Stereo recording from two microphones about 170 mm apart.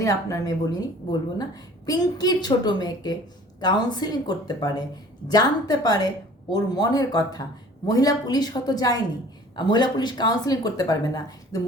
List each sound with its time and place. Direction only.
0.0 s speech: 20° left (ahead or behind)